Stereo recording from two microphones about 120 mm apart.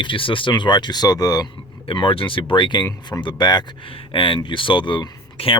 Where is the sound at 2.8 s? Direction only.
30° left (ahead or behind).